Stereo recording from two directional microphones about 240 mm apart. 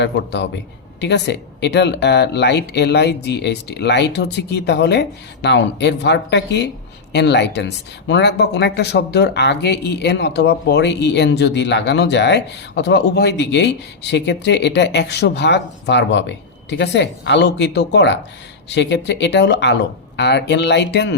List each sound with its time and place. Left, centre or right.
0.0 s speech: left